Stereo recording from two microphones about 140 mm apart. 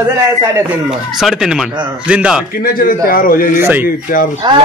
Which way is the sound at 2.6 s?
90° left.